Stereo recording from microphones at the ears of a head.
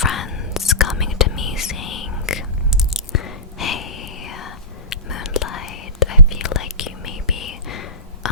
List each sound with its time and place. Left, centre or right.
0.0 s whispering: left